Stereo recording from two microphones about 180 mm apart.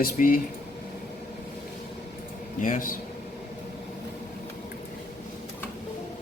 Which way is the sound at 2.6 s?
45° left (ahead or behind).